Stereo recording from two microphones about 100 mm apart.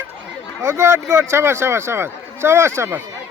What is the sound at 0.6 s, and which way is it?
A man's voice, 25° right (ahead or behind).